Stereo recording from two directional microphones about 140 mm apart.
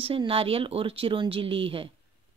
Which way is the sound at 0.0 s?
40° right (ahead or behind).